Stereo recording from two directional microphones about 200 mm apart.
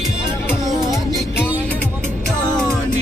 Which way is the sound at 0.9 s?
Centre (ahead or behind).